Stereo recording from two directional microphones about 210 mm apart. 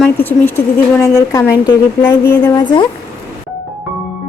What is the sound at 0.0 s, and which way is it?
A woman's voice, 10° left (ahead or behind).